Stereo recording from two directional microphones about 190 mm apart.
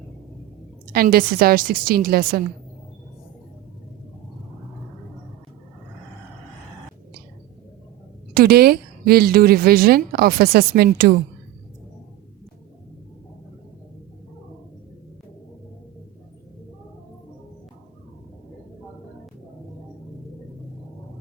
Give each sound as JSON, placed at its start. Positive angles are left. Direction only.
{"t": 0.9, "sound": "a woman's voice", "side_deg": -50}
{"t": 8.3, "sound": "a woman's voice", "side_deg": -55}